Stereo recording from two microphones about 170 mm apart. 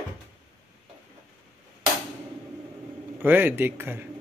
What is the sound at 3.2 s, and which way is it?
Speech, 10° right (ahead or behind).